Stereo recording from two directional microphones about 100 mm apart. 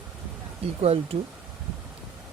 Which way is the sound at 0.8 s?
90° right.